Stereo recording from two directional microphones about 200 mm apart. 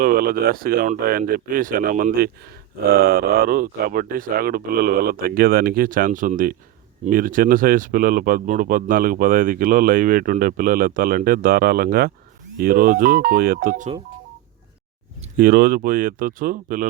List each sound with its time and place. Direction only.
0.0 s speech: 45° right (ahead or behind)
15.4 s speech: 45° right (ahead or behind)